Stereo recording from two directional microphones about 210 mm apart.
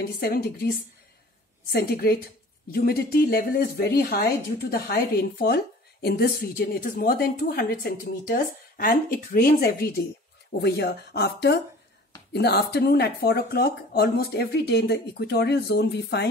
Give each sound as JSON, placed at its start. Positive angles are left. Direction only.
{"t": 0.0, "sound": "speech", "side_deg": 45}
{"t": 1.7, "sound": "speech", "side_deg": 45}